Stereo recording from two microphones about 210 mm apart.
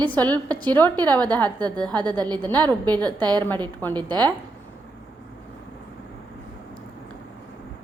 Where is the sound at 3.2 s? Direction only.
20° right (ahead or behind).